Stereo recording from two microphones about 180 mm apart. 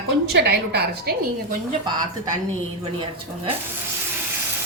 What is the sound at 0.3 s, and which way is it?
Speech, 65° right (ahead or behind).